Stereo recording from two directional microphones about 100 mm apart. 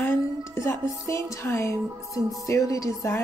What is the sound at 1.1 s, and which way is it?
A woman's voice, 30° left (ahead or behind).